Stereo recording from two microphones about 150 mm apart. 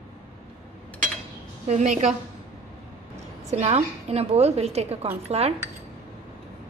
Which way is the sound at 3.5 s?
45° right (ahead or behind).